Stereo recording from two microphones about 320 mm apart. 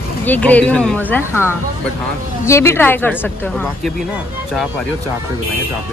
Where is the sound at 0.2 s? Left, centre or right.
Centre.